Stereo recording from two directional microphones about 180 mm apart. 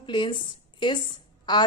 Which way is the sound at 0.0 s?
25° left (ahead or behind).